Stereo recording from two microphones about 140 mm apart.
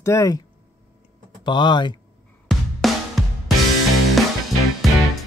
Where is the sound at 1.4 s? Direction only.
35° left (ahead or behind).